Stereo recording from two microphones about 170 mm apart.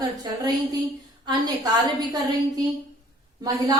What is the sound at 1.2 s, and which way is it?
Speech, 25° right (ahead or behind).